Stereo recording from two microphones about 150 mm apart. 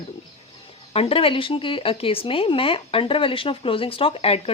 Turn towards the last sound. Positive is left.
turn(degrees=40)  # may be behind; listen again after turning